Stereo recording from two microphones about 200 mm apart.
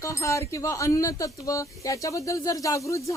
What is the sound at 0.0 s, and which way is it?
Speech, 15° left (ahead or behind).